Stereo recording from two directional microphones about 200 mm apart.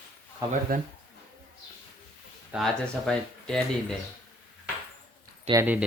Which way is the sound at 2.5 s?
Centre (ahead or behind).